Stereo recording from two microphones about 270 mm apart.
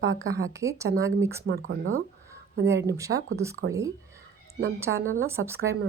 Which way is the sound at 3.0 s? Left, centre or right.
Centre.